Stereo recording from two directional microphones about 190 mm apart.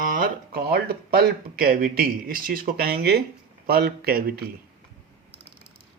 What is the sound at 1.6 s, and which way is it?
A man's voice, 50° right (ahead or behind).